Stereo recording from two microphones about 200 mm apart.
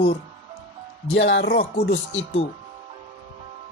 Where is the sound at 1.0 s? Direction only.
65° left (ahead or behind).